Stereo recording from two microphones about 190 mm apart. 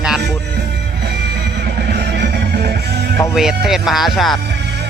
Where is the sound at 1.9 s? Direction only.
60° right (ahead or behind).